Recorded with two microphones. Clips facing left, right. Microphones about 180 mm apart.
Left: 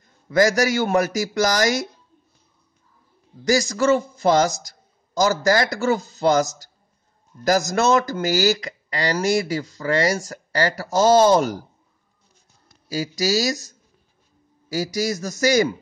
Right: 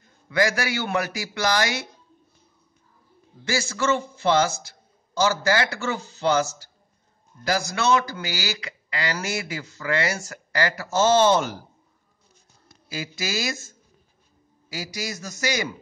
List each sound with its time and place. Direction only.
0.3 s speech: 40° left (ahead or behind)
3.4 s speech: 40° left (ahead or behind)
12.8 s a man's voice: 40° left (ahead or behind)